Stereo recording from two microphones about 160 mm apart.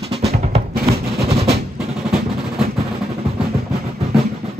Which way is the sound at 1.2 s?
40° right (ahead or behind).